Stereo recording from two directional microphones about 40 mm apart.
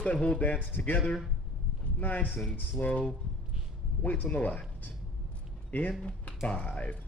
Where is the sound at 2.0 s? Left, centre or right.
Left.